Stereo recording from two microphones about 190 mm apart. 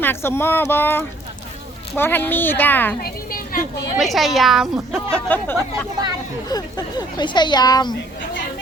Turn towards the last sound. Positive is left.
turn(degrees=20)  # may be behind; listen again after turning